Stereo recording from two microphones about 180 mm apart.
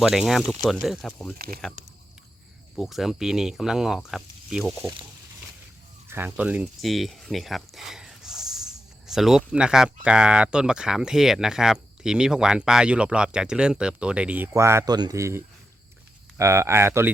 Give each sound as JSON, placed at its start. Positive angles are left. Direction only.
{"t": 0.0, "sound": "speech", "side_deg": 0}
{"t": 1.8, "sound": "speech", "side_deg": -45}
{"t": 2.7, "sound": "speech", "side_deg": 0}
{"t": 4.8, "sound": "speech", "side_deg": -25}
{"t": 6.1, "sound": "speech", "side_deg": -10}